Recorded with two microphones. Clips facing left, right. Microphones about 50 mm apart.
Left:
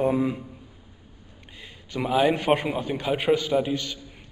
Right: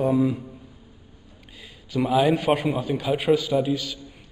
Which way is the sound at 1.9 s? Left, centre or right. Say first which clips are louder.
Right 2 dB; centre.